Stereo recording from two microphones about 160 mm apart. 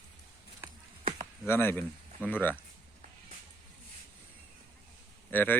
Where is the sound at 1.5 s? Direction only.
15° left (ahead or behind).